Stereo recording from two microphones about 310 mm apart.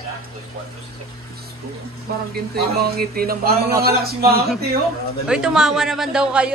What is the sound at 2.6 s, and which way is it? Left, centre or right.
Speech, right.